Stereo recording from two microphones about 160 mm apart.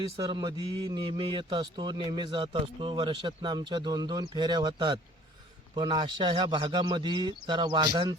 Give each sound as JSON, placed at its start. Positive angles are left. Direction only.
{"t": 0.3, "sound": "a man's voice", "side_deg": -25}